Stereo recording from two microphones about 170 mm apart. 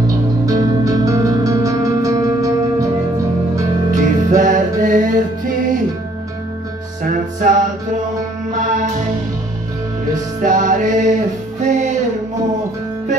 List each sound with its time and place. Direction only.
0.0 s music: 20° right (ahead or behind)
3.9 s music: 50° right (ahead or behind)
7.0 s music: 50° right (ahead or behind)
10.1 s music: 50° right (ahead or behind)